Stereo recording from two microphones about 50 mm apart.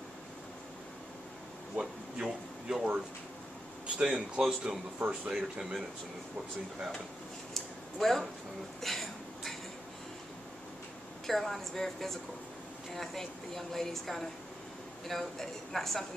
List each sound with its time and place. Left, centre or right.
1.8 s speech: centre
4.0 s a woman's voice: centre
4.9 s speech: right
5.3 s speech: centre
7.5 s a sound: centre
11.2 s a woman's voice: centre